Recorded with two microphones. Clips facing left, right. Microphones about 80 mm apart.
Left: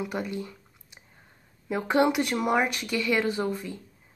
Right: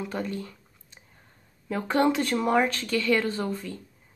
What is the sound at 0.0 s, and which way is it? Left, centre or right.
Squish, centre.